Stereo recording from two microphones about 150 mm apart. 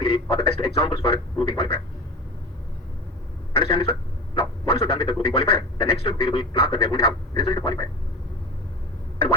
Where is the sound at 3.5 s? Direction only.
40° left (ahead or behind).